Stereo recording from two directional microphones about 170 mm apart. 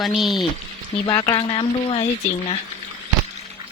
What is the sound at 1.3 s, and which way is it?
Speech, 30° left (ahead or behind).